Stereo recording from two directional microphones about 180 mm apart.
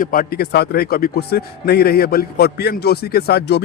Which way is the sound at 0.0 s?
50° left (ahead or behind).